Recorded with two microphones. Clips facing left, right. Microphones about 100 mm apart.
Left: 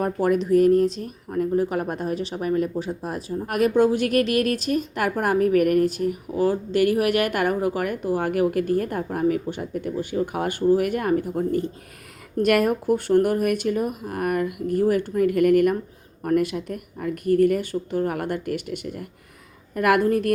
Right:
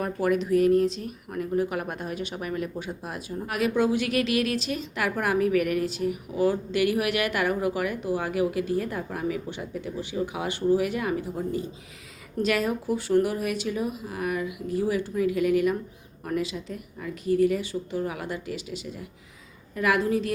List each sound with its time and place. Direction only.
0.0 s speech: 40° left (ahead or behind); by 20.3 s 55° left (ahead or behind)